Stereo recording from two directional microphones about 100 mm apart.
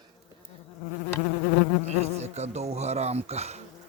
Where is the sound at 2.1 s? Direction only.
90° right.